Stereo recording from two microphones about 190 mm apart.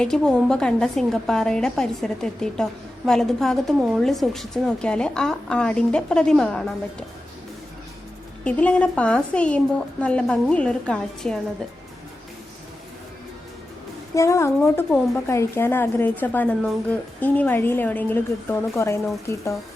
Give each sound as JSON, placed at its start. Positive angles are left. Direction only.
{"t": 0.0, "sound": "a woman's voice", "side_deg": 5}
{"t": 8.4, "sound": "a woman's voice", "side_deg": 5}
{"t": 14.2, "sound": "a woman's voice", "side_deg": 15}